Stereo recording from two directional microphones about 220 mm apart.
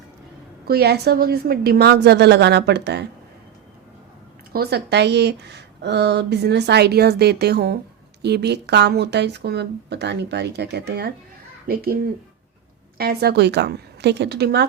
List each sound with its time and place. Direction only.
0.7 s a woman's voice: 45° right (ahead or behind)
4.5 s a woman's voice: 45° right (ahead or behind)
13.0 s a woman's voice: 45° right (ahead or behind)